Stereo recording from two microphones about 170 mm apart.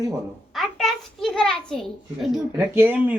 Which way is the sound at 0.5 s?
Centre (ahead or behind).